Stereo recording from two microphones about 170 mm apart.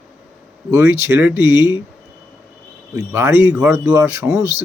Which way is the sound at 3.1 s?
15° right (ahead or behind).